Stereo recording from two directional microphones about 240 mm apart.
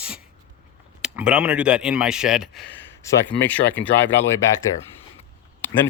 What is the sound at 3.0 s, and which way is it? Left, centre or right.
Speech, centre.